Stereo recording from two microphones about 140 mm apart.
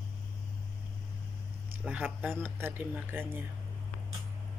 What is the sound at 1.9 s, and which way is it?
Speech, 10° right (ahead or behind).